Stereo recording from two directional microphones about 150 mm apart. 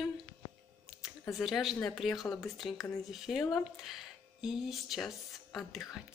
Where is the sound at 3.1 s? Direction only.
Centre (ahead or behind).